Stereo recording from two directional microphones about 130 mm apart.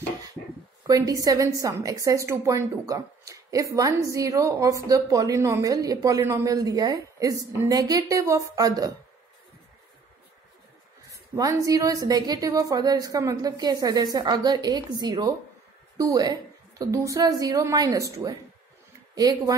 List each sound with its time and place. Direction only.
0.8 s a woman's voice: 30° right (ahead or behind)
11.1 s a woman's voice: 25° right (ahead or behind)